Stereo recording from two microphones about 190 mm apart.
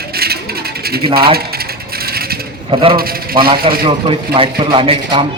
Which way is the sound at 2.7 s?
30° right (ahead or behind).